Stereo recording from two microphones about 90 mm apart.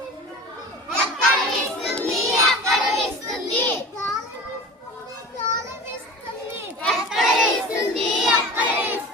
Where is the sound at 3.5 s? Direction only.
25° left (ahead or behind).